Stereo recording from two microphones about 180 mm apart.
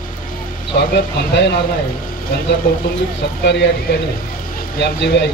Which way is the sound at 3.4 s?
70° left (ahead or behind).